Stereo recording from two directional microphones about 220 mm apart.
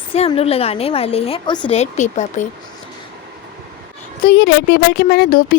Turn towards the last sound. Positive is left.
turn(degrees=40)  # may be behind; listen again after turning